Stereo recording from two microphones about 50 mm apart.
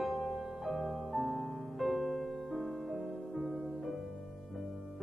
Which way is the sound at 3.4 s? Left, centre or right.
Centre.